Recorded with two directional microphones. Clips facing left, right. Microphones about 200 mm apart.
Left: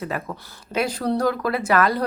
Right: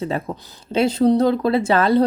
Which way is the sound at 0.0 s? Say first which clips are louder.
Right 5 dB; 25° right (ahead or behind).